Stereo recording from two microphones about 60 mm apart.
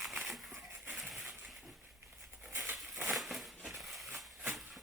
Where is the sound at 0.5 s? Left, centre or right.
Right.